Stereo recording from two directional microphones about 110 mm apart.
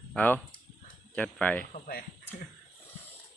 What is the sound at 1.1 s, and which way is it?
Speech, 10° left (ahead or behind).